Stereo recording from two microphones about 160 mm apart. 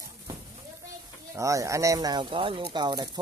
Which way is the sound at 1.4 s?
20° right (ahead or behind).